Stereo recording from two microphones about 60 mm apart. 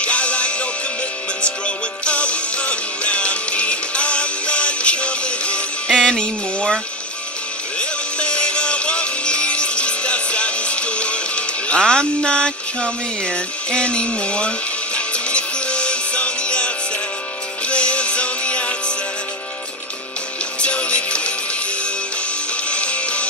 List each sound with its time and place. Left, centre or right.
0.0 s music: left
2.0 s music: left
7.8 s music: centre
20.6 s music: centre
22.7 s music: left